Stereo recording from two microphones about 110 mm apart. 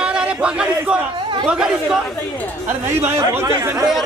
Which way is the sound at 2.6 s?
20° right (ahead or behind).